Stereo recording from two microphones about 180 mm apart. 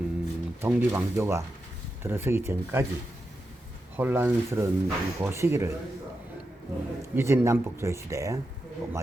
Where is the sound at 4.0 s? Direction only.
10° right (ahead or behind).